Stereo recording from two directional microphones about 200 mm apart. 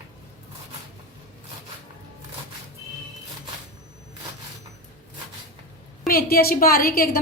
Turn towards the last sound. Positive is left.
turn(degrees=50)  # may be behind; listen again after turning